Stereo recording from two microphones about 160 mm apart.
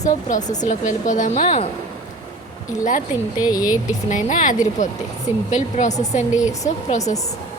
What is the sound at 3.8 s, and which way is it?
Speech, 50° left (ahead or behind).